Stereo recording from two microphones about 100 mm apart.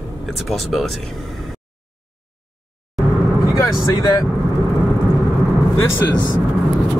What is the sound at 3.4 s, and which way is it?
Vehicle, 40° left (ahead or behind).